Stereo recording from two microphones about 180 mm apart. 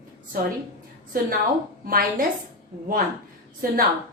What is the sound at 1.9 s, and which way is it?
Speech, 50° right (ahead or behind).